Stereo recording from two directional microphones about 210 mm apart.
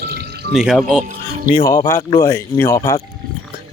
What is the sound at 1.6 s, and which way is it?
Speech, 15° left (ahead or behind).